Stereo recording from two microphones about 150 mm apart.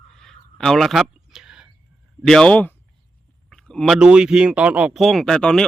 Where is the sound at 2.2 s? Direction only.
5° left (ahead or behind).